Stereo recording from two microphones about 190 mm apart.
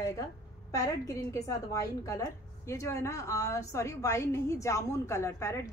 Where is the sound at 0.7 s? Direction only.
15° left (ahead or behind).